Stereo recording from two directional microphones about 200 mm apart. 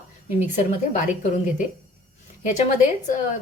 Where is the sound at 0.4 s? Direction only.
40° left (ahead or behind).